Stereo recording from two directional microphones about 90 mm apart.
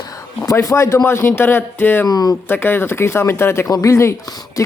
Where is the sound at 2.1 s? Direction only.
45° left (ahead or behind).